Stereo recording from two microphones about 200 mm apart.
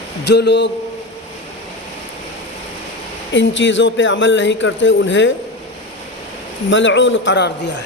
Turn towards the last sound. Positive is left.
turn(degrees=60)  # may be behind; listen again after turning